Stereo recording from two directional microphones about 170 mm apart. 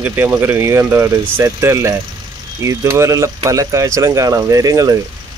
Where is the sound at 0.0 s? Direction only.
10° right (ahead or behind).